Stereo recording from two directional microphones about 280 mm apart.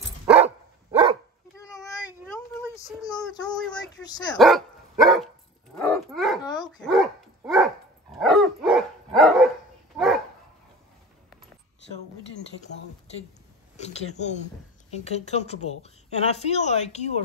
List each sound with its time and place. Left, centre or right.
1.6 s a sound: centre
2.5 s child singing: centre
4.4 s dog: centre
6.4 s dog: centre
6.8 s dog: centre
13.7 s speech: left